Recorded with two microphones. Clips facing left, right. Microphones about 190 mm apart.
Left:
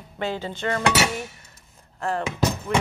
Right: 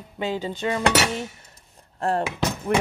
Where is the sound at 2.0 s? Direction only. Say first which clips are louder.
Right 3 dB; 35° right (ahead or behind).